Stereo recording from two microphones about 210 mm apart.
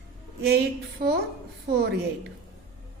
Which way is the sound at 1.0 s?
45° right (ahead or behind).